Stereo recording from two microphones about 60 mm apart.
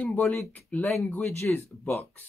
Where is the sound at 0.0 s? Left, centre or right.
Left.